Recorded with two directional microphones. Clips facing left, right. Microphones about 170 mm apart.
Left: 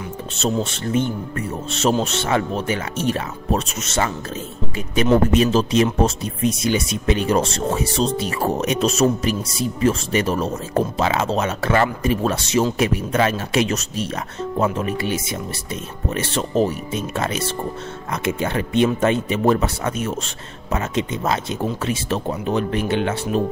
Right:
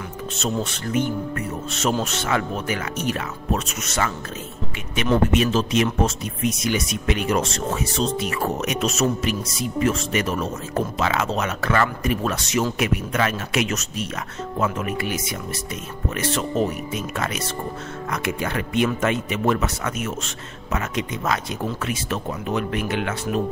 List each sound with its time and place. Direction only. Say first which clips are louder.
0.4 s speech: left 4 dB; 25° left (ahead or behind)